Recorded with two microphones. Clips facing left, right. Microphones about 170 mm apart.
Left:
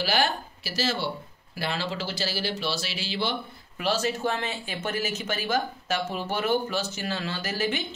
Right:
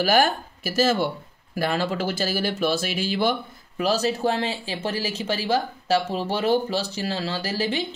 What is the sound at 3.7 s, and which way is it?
Speech, 35° right (ahead or behind).